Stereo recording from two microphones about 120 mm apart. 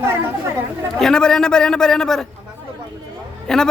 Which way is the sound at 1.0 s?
5° left (ahead or behind).